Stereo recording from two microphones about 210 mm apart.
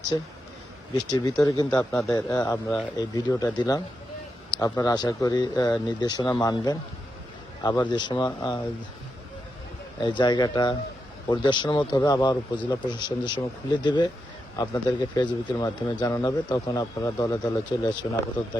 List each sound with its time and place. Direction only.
1.1 s speech: 20° left (ahead or behind)
1.7 s speech: 5° left (ahead or behind)
2.1 s speech: 15° left (ahead or behind)
4.8 s speech: 20° left (ahead or behind)
10.0 s speech: 20° left (ahead or behind)